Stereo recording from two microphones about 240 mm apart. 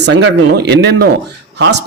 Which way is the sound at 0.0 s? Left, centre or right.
Right.